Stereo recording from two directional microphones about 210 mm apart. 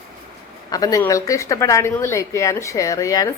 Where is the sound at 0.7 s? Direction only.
15° left (ahead or behind).